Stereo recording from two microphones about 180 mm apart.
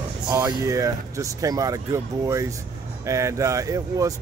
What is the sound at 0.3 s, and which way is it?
Speech, 20° right (ahead or behind).